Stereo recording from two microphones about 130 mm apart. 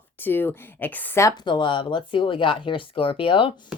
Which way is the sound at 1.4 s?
35° left (ahead or behind).